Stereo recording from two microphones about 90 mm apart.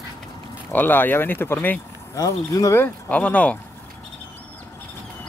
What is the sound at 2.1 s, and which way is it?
Speech, 40° left (ahead or behind).